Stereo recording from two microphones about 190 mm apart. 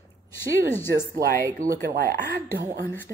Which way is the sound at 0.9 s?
50° right (ahead or behind).